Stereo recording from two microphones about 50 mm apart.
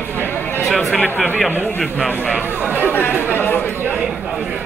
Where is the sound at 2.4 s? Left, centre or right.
Right.